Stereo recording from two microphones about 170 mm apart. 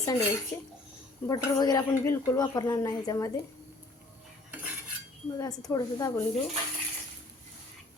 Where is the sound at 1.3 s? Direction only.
20° left (ahead or behind).